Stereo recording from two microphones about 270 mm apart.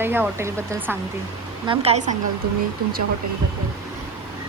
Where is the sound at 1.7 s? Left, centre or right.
Right.